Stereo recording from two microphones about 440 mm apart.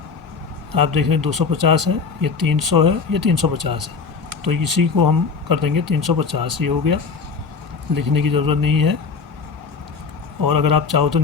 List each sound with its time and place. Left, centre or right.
0.7 s speech: right
10.4 s speech: right